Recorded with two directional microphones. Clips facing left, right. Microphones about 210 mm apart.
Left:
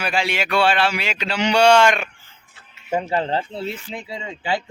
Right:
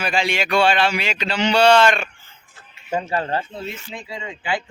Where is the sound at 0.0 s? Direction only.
5° left (ahead or behind).